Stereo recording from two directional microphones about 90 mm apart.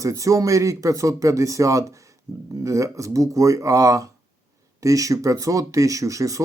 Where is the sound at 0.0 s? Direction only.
35° right (ahead or behind).